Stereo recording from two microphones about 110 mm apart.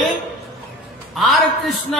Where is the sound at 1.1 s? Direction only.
Centre (ahead or behind).